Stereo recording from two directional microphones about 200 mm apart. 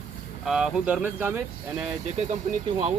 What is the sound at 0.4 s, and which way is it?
Speech, 5° right (ahead or behind).